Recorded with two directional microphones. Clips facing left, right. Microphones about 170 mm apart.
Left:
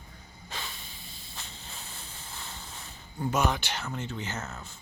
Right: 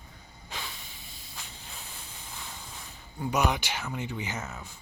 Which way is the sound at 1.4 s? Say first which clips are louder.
Even; 15° right (ahead or behind).